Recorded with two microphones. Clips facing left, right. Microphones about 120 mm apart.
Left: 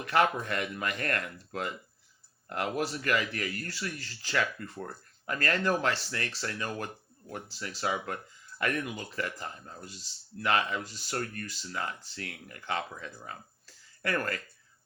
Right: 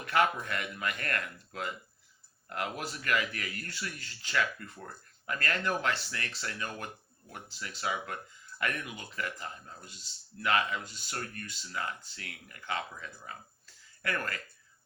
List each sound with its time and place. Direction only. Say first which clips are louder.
0.0 s speech: left 2 dB; 35° left (ahead or behind)